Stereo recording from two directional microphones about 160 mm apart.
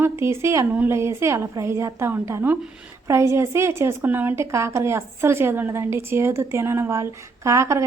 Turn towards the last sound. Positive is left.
turn(degrees=-20)  # may be behind; listen again after turning